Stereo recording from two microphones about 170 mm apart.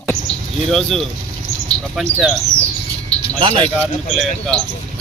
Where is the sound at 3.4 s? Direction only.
30° right (ahead or behind).